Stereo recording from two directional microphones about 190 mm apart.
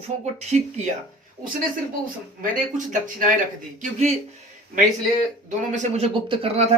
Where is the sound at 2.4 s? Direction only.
45° right (ahead or behind).